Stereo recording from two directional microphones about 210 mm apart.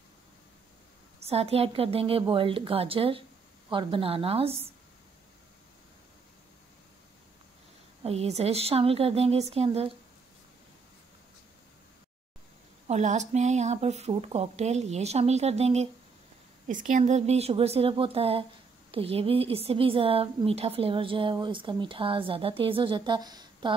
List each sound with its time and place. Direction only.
1.2 s a woman's voice: 30° right (ahead or behind)
8.0 s a woman's voice: 30° right (ahead or behind)
12.8 s a woman's voice: 35° right (ahead or behind)